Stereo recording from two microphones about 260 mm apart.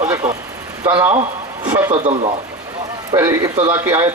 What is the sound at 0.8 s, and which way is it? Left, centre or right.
A man's voice, centre.